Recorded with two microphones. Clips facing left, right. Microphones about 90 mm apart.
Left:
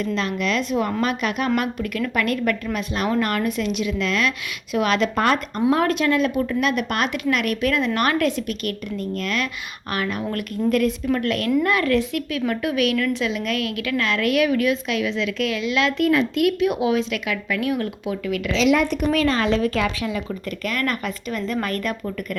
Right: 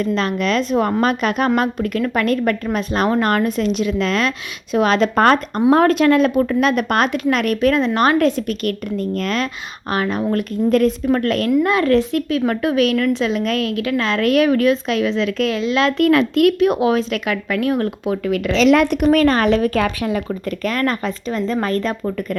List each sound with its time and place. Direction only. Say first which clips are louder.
0.0 s a woman's voice: right 5 dB; 45° right (ahead or behind)
11.6 s a woman's voice: right 4 dB; 30° right (ahead or behind)
16.0 s speech: right 6 dB; 55° right (ahead or behind)
18.5 s speech: right 5 dB; 75° right (ahead or behind)
19.1 s a woman's voice: right 5 dB; 55° right (ahead or behind); by 22.4 s 30° right (ahead or behind)